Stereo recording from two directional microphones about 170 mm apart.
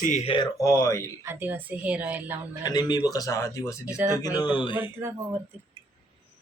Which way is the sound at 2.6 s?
25° left (ahead or behind).